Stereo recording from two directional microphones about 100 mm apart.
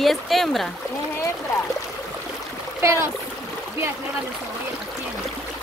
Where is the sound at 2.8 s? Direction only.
30° right (ahead or behind).